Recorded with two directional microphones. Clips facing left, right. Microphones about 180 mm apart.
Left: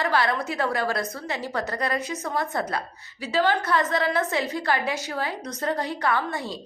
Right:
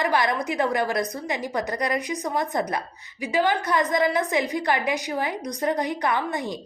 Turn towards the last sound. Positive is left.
turn(degrees=-15)  # may be behind; listen again after turning